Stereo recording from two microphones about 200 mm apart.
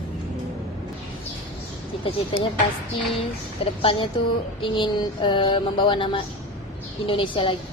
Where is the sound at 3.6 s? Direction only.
25° left (ahead or behind).